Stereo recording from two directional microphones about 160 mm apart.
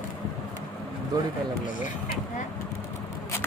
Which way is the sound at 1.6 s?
55° left (ahead or behind).